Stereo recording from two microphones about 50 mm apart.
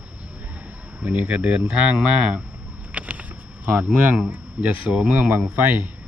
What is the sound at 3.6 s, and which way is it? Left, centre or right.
Speech, right.